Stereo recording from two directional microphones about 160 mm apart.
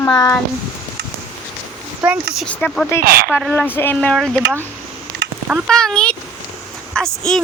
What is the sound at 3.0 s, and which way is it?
Speech, 70° right (ahead or behind).